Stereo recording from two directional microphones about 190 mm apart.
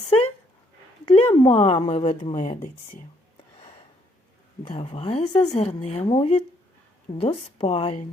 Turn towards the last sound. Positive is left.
turn(degrees=30)  # may be behind; listen again after turning